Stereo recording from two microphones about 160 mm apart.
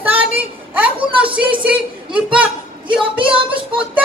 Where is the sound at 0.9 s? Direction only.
35° right (ahead or behind).